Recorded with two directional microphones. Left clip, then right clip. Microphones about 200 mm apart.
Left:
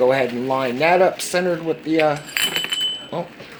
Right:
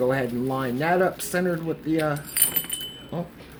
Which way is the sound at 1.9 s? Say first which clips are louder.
Left 7 dB; 25° right (ahead or behind).